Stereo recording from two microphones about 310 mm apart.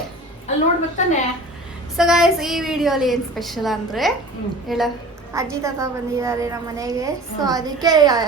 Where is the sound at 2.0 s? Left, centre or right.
Centre.